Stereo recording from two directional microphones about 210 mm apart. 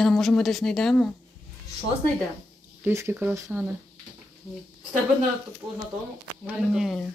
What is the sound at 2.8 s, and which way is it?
Speech, 10° right (ahead or behind).